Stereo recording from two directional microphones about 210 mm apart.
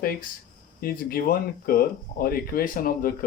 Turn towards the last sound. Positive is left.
turn(degrees=45)  # may be behind; listen again after turning